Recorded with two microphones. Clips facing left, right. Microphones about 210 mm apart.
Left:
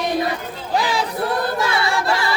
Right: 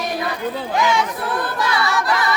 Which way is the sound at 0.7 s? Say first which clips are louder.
Right 1 dB; 35° left (ahead or behind).